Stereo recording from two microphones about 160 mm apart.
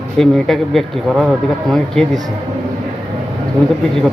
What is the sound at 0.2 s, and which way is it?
A man's voice, centre (ahead or behind).